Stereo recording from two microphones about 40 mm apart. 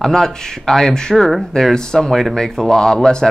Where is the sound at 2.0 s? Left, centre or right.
Centre.